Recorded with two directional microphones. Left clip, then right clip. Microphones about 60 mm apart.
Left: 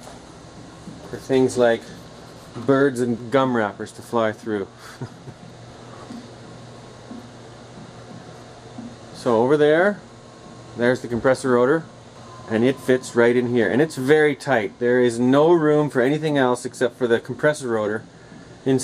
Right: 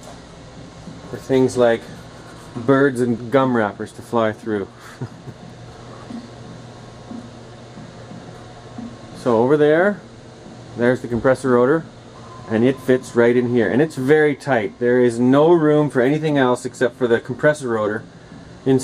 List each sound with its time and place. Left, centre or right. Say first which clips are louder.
1.4 s speech: right 2 dB; centre
9.2 s speech: right 2 dB; centre
16.8 s speech: right 2 dB; centre